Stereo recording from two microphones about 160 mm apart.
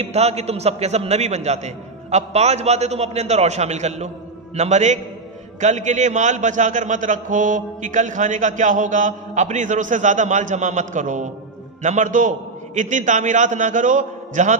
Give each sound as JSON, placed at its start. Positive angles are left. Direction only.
{"t": 0.0, "sound": "a man's voice", "side_deg": -40}